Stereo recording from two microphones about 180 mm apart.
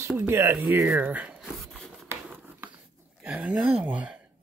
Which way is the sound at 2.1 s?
10° right (ahead or behind).